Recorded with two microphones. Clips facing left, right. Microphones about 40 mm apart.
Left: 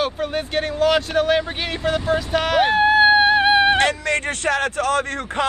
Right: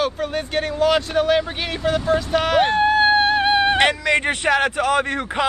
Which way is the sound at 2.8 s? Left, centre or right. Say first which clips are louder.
Left 2 dB; centre.